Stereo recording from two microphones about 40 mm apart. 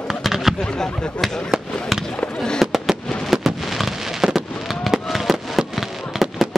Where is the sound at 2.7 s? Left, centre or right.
Centre.